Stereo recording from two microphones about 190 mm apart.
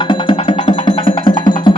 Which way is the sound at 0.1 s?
25° left (ahead or behind).